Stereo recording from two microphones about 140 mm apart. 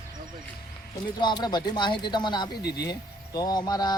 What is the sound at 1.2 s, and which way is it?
Speech, 30° left (ahead or behind).